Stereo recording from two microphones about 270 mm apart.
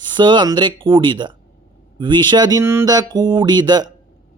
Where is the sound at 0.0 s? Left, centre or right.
Centre.